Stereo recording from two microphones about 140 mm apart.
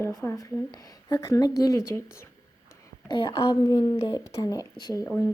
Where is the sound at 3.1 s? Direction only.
35° left (ahead or behind).